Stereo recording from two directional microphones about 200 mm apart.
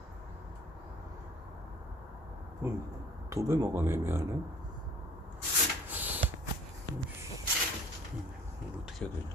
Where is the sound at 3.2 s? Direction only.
15° right (ahead or behind).